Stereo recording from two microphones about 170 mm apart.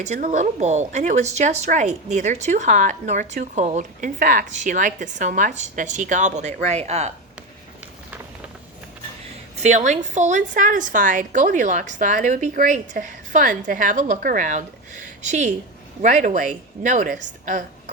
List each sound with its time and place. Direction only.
0.0 s a woman's voice: 45° right (ahead or behind)
9.6 s a woman's voice: 45° right (ahead or behind)